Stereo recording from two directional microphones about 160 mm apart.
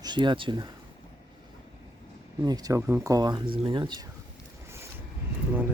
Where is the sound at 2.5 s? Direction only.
20° right (ahead or behind).